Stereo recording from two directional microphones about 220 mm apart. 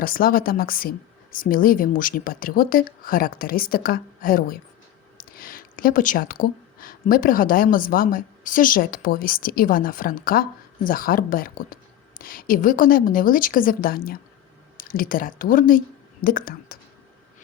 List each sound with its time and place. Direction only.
0.0 s speech: 40° left (ahead or behind)